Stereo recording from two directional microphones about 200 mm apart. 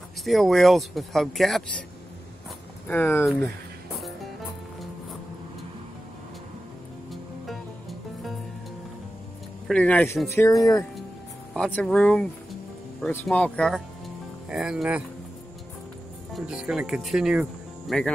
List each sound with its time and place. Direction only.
0.2 s speech: centre (ahead or behind)
2.9 s speech: 10° left (ahead or behind)
7.1 s music: centre (ahead or behind)
9.7 s speech: 5° left (ahead or behind)
11.5 s speech: 5° left (ahead or behind)
16.3 s speech: 5° right (ahead or behind)